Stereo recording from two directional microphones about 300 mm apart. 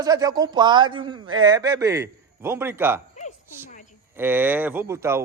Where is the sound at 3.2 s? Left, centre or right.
Left.